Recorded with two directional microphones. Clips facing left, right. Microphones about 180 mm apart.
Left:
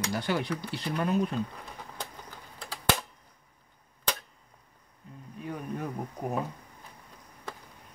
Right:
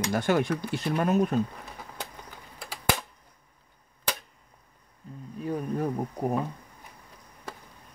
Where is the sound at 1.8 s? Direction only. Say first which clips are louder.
Right 1 dB; 10° right (ahead or behind).